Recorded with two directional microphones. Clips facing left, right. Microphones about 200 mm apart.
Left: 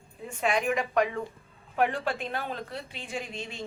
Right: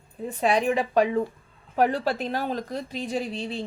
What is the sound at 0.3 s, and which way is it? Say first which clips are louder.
A woman's voice: right 5 dB; 35° right (ahead or behind).